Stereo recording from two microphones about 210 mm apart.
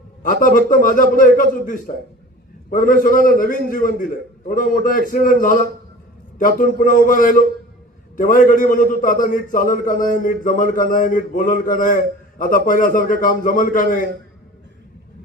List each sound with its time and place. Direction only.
0.2 s a man's voice: 40° left (ahead or behind)